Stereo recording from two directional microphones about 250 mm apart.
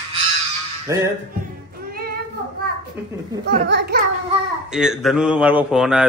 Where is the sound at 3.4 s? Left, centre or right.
Right.